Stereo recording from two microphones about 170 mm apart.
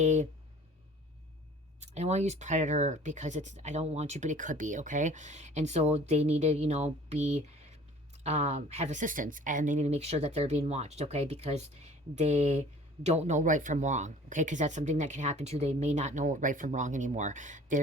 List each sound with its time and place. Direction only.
0.0 s speech: 45° right (ahead or behind)
1.8 s speech: 40° right (ahead or behind)